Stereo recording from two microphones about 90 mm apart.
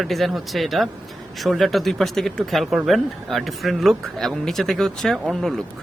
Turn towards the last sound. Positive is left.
turn(degrees=5)  # may be behind; listen again after turning